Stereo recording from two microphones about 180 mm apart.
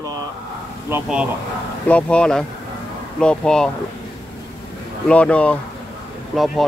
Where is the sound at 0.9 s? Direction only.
5° right (ahead or behind).